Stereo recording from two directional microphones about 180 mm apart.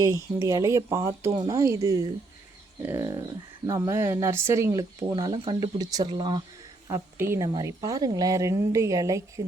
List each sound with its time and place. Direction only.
0.0 s speech: 15° right (ahead or behind)